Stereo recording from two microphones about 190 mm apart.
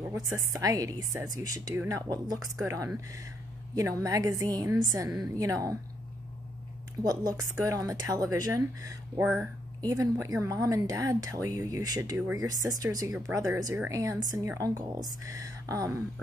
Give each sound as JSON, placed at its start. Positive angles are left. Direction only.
{"t": 0.0, "sound": "a woman's voice", "side_deg": -15}
{"t": 7.0, "sound": "a woman's voice", "side_deg": -20}